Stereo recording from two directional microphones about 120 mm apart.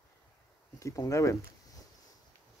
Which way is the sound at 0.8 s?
25° left (ahead or behind).